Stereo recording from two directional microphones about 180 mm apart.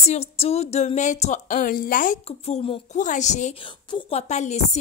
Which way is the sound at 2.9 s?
45° left (ahead or behind).